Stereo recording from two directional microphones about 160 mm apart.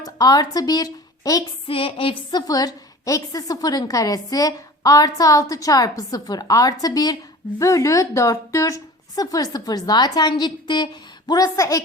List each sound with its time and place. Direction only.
0.0 s a woman's voice: 25° left (ahead or behind)
1.6 s a sound: 35° left (ahead or behind)
2.5 s a woman's voice: 25° left (ahead or behind)